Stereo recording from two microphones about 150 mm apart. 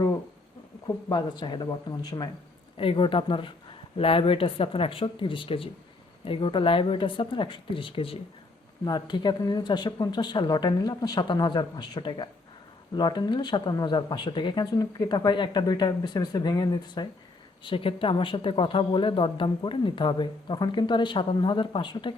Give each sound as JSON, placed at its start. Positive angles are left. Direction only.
{"t": 0.9, "sound": "speech", "side_deg": 30}
{"t": 2.7, "sound": "speech", "side_deg": 35}